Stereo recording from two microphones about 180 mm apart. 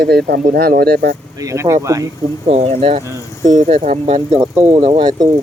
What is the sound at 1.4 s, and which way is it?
Speech, 15° right (ahead or behind).